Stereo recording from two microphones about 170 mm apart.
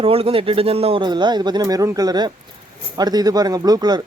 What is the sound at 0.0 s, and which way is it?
Speech, 35° right (ahead or behind).